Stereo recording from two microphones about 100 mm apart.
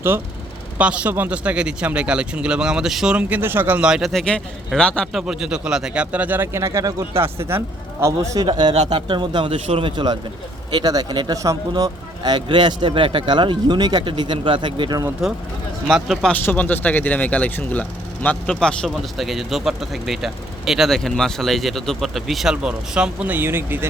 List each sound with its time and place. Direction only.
0.8 s speech: 10° right (ahead or behind)
3.8 s speech: 5° right (ahead or behind)
4.1 s speech: 5° left (ahead or behind)
5.1 s a man's voice: 5° right (ahead or behind); by 8.4 s 30° right (ahead or behind)
8.4 s speech: 45° right (ahead or behind)
9.5 s a man's voice: 70° right (ahead or behind)
9.9 s speech: 45° right (ahead or behind)
15.9 s speech: 5° right (ahead or behind)
16.3 s speech: 15° left (ahead or behind); by 23.9 s 20° right (ahead or behind)